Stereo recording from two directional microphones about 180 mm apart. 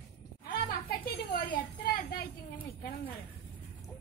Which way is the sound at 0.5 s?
55° left (ahead or behind).